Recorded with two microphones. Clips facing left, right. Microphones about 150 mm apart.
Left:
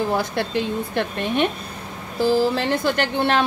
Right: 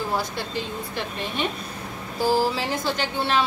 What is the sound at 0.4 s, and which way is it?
A woman's voice, 60° left (ahead or behind).